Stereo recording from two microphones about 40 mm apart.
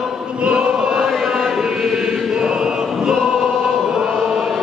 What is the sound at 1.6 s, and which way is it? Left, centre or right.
Choir, centre.